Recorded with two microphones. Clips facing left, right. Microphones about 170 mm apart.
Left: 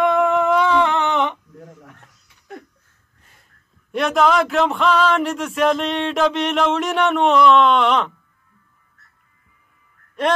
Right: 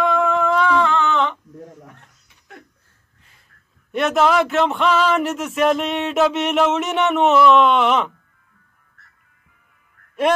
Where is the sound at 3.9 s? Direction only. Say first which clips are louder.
Even; centre (ahead or behind).